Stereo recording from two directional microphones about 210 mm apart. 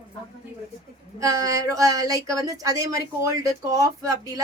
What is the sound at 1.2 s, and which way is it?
Speech, 15° right (ahead or behind).